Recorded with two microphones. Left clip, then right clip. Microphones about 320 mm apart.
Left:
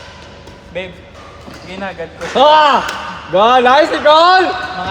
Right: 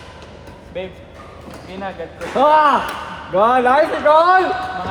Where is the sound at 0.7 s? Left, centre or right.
Left.